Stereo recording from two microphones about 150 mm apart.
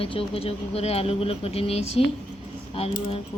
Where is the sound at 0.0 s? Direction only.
40° left (ahead or behind).